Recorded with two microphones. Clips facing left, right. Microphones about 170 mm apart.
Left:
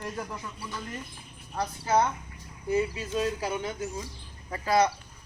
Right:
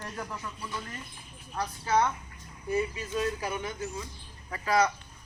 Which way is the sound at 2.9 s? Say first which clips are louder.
Left 2 dB; 30° left (ahead or behind).